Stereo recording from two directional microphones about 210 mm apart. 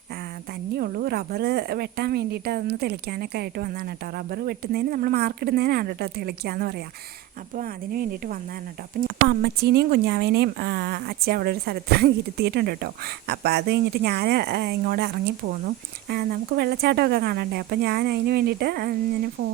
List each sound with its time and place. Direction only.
0.8 s a woman's voice: 45° right (ahead or behind)